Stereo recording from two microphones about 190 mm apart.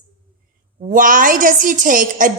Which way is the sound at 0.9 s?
45° right (ahead or behind).